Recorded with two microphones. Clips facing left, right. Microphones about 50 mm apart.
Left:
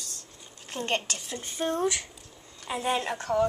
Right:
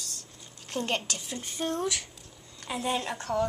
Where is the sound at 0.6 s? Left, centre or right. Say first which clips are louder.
Left 1 dB; centre.